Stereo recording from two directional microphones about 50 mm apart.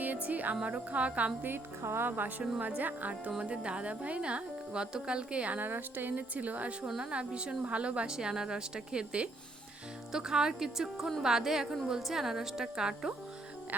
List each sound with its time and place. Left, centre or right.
0.0 s music: right
0.5 s speech: right
1.4 s a woman's voice: right
1.8 s speech: right
2.0 s a woman's voice: right
5.5 s a woman's voice: right
6.8 s speech: centre
7.1 s speech: right